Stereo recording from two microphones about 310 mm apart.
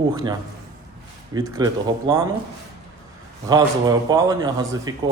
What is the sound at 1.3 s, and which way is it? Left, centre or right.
Speech, centre.